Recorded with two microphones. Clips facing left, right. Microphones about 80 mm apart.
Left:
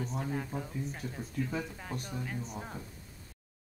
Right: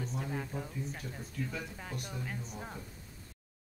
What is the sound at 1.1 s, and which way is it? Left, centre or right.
Speech, centre.